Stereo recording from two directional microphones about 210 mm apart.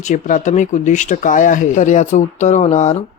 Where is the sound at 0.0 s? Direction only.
40° left (ahead or behind).